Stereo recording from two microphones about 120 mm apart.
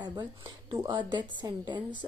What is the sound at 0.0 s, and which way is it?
Speech, 35° right (ahead or behind).